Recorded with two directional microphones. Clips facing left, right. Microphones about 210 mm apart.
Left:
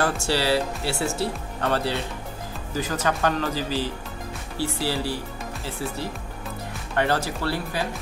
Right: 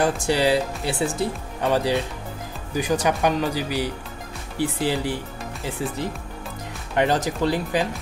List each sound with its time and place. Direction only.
0.0 s speech: 15° right (ahead or behind)